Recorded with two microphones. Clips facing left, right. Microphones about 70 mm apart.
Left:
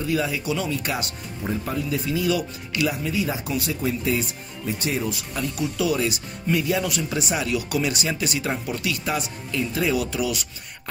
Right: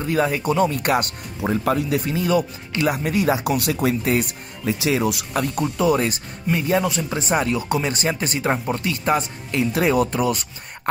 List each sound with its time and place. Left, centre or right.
0.0 s speech: right
1.4 s speech: right
2.0 s speech: right
2.9 s speech: right
5.8 s speech: right
6.5 s speech: centre
6.8 s speech: right
9.6 s speech: right
9.9 s speech: right